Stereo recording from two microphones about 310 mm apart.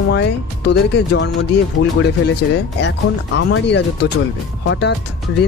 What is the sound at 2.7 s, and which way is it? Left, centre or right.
Speech, left.